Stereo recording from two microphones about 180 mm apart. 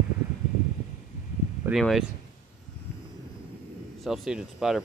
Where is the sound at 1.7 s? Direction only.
Centre (ahead or behind).